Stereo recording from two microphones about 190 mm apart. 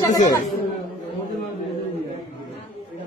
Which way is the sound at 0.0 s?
20° left (ahead or behind).